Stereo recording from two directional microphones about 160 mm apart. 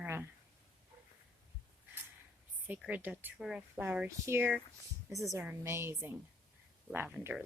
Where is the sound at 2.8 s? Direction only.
10° right (ahead or behind).